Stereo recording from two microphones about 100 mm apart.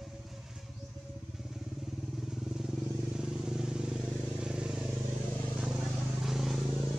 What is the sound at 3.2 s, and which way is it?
Vehicle, 5° right (ahead or behind).